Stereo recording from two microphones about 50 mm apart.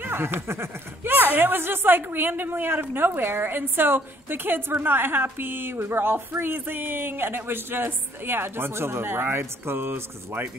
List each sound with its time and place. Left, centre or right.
0.0 s a woman's voice: right
1.1 s a woman's voice: right